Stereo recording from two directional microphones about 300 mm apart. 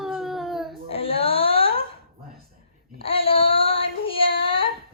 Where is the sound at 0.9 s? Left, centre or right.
Centre.